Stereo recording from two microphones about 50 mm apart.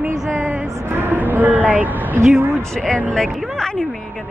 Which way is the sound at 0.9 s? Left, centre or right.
Right.